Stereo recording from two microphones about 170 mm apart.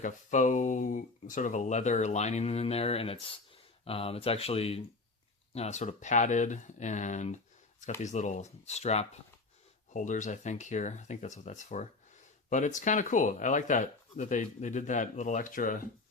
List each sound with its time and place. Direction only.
0.0 s speech: 45° left (ahead or behind)